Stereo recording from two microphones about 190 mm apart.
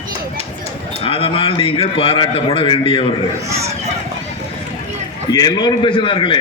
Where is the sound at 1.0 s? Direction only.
30° left (ahead or behind).